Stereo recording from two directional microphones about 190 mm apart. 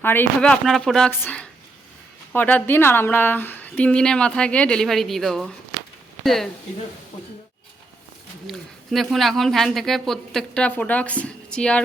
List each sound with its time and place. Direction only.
0.0 s a woman's voice: 10° left (ahead or behind)
8.4 s speech: centre (ahead or behind)